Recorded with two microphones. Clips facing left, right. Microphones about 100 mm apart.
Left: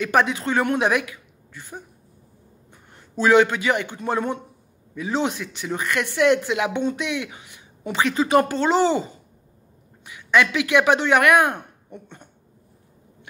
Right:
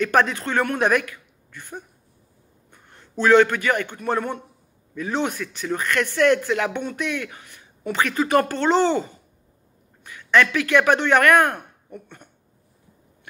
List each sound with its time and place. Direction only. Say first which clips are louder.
0.0 s a man's voice: even; 15° left (ahead or behind)